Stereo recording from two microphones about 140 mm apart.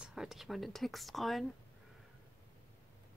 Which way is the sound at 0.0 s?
5° right (ahead or behind).